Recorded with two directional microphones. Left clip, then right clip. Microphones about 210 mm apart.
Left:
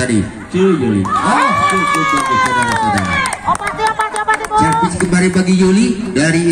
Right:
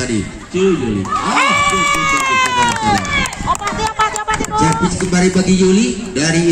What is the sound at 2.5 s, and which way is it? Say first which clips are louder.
Speech: even; 40° right (ahead or behind).